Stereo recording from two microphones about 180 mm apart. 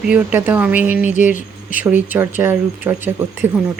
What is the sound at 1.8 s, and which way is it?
Speech, 10° right (ahead or behind).